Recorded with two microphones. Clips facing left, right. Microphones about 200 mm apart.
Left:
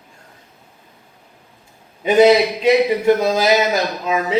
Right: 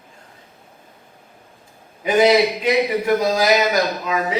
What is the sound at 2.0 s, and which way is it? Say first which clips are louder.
A man's voice: left 3 dB; 25° left (ahead or behind).